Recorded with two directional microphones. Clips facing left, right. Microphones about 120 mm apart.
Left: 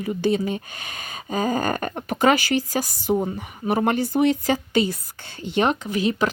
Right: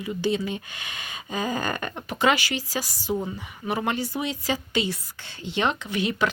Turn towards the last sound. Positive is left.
turn(degrees=35)  # may be behind; listen again after turning